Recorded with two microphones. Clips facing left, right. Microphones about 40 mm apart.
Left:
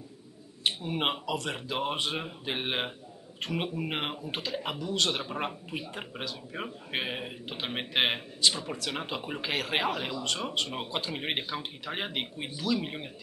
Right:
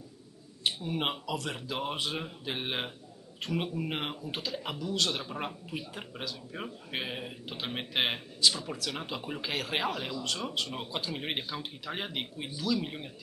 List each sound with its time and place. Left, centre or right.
0.7 s speech: left